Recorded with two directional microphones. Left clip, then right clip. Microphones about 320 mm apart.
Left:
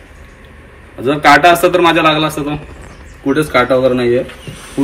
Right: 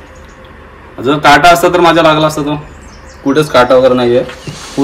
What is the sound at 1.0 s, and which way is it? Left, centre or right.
A man's voice, centre.